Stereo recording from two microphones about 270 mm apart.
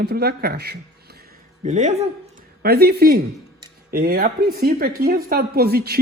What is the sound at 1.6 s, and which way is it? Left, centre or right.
Speech, right.